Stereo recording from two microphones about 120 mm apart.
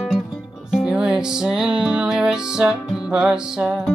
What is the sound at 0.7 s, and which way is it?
Music, 5° right (ahead or behind).